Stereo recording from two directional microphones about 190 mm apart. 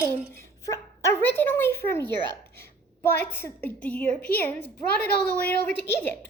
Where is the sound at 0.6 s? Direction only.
15° left (ahead or behind).